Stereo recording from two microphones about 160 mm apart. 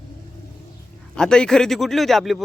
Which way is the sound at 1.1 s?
5° left (ahead or behind).